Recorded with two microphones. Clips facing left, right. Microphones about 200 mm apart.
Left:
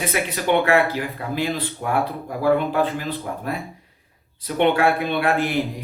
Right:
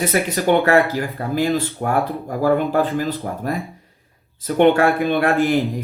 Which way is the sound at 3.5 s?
45° right (ahead or behind).